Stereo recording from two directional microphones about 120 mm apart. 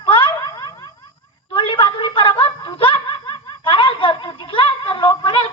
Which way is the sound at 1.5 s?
45° left (ahead or behind).